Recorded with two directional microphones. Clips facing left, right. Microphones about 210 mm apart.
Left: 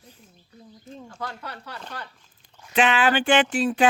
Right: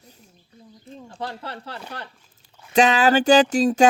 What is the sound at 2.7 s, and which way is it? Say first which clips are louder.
Speech: right 4 dB; 40° right (ahead or behind).